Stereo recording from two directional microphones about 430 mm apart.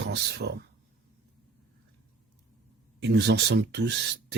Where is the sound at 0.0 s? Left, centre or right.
Right.